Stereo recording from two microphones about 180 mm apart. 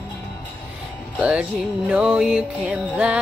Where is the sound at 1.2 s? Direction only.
5° right (ahead or behind).